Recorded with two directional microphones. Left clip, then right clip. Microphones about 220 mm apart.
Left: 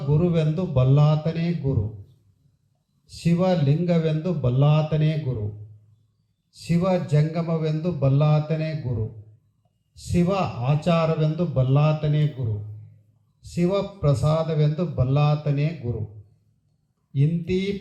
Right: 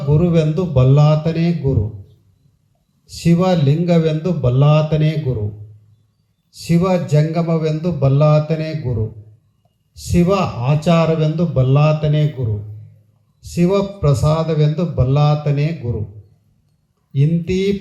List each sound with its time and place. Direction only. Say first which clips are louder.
0.1 s speech: right 7 dB; 50° right (ahead or behind)
3.1 s speech: right 6 dB; 50° right (ahead or behind)
6.5 s speech: right 6 dB; 50° right (ahead or behind)
9.9 s speech: right 8 dB; 50° right (ahead or behind)
17.1 s speech: right 6 dB; 50° right (ahead or behind)